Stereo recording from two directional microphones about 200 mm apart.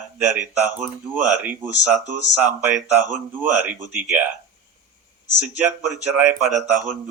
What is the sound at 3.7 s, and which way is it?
Speech, 5° right (ahead or behind).